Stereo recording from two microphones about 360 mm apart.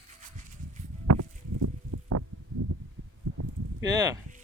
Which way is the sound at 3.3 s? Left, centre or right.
Right.